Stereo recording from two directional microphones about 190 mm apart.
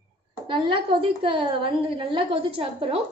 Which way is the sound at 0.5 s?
25° right (ahead or behind).